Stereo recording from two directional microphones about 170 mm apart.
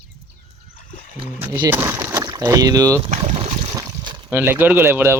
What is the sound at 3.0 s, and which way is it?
Boat, 30° right (ahead or behind).